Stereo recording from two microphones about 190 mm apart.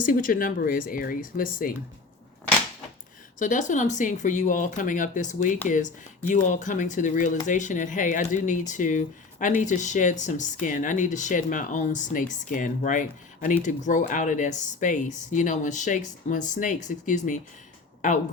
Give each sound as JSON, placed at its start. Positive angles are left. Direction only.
{"t": 0.0, "sound": "speech", "side_deg": 45}
{"t": 3.3, "sound": "speech", "side_deg": 45}